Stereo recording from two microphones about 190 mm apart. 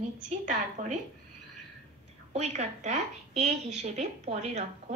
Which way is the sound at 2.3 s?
35° right (ahead or behind).